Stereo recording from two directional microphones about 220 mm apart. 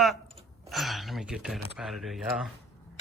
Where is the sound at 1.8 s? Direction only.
Centre (ahead or behind).